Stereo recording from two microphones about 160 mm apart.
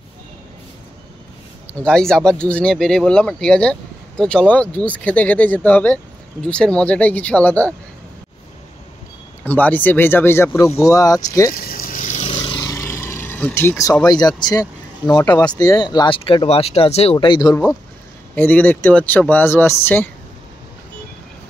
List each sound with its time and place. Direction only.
1.7 s speech: 5° left (ahead or behind)
9.4 s speech: 10° left (ahead or behind)
11.5 s a sound: 65° left (ahead or behind); by 12.3 s 50° left (ahead or behind)
12.3 s vehicle: 30° left (ahead or behind)
12.6 s vehicle: 15° left (ahead or behind)
14.0 s speech: 25° left (ahead or behind)
18.3 s speech: 10° left (ahead or behind)